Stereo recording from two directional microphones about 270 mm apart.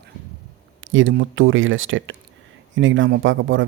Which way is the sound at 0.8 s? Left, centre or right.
Right.